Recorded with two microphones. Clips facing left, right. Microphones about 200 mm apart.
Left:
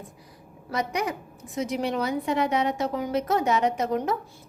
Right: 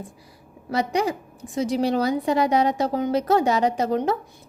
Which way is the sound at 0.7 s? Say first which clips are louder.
Right 5 dB; 30° right (ahead or behind).